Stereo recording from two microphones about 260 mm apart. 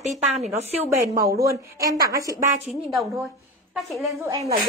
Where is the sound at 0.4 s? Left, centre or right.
Right.